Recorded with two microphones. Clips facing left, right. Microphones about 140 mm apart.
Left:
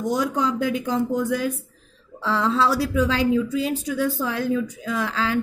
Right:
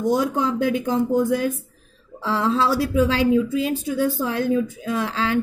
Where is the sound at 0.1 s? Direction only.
25° right (ahead or behind).